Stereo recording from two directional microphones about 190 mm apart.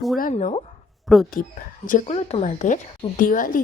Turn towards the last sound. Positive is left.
turn(degrees=45)  # may be behind; listen again after turning